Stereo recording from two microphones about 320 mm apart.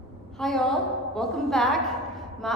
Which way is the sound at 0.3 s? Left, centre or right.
Centre.